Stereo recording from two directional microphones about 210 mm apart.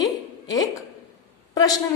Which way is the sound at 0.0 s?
20° left (ahead or behind).